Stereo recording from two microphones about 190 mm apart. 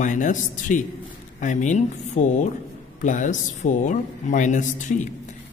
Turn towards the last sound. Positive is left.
turn(degrees=40)  # may be behind; listen again after turning